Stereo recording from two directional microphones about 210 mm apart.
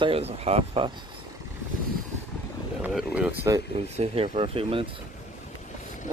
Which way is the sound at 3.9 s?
30° right (ahead or behind).